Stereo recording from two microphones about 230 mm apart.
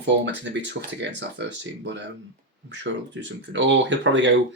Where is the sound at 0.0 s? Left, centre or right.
Right.